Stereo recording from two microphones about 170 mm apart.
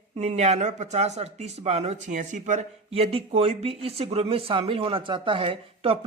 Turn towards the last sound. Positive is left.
turn(degrees=-30)  # may be behind; listen again after turning